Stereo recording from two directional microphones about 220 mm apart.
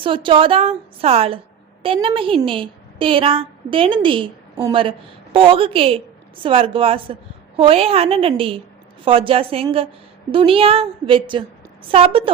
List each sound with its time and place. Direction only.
0.0 s a woman's voice: 20° right (ahead or behind)